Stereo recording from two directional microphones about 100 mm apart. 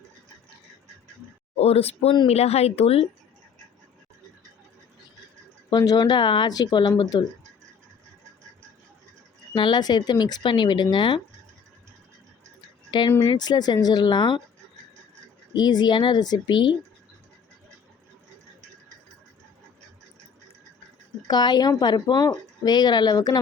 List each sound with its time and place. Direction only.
1.5 s speech: 90° left
5.7 s speech: 40° left (ahead or behind)
9.6 s speech: 50° left (ahead or behind)
13.1 s speech: 35° left (ahead or behind)
13.3 s speech: 45° left (ahead or behind)
15.5 s speech: 45° left (ahead or behind)
21.2 s speech: 45° left (ahead or behind)